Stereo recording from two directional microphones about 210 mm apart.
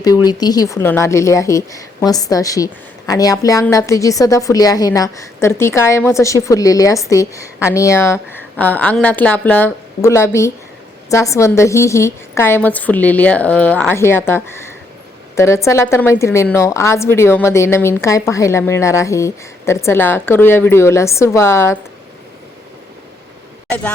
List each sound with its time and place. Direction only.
0.0 s a woman's voice: 15° left (ahead or behind)